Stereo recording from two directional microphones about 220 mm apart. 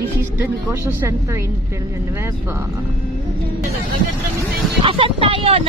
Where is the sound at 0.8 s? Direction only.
15° right (ahead or behind).